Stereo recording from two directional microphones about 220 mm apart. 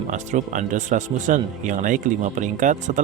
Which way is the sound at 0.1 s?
35° right (ahead or behind).